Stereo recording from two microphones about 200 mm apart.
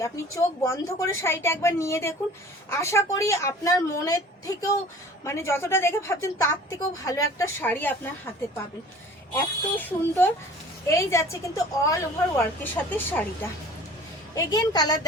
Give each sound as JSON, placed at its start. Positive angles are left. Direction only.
{"t": 0.0, "sound": "a woman's voice", "side_deg": 15}
{"t": 9.3, "sound": "a woman's voice", "side_deg": 10}
{"t": 14.3, "sound": "a woman's voice", "side_deg": 20}